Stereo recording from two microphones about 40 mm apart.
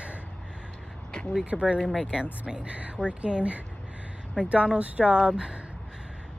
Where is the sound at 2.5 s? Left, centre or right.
Right.